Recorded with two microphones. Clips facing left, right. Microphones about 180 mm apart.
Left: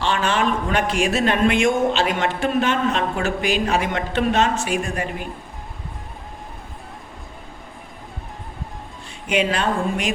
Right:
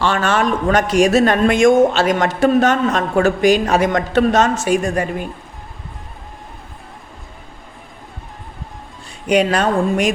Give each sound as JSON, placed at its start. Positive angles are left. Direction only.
{"t": 0.0, "sound": "a man's voice", "side_deg": -45}
{"t": 9.2, "sound": "speech", "side_deg": -40}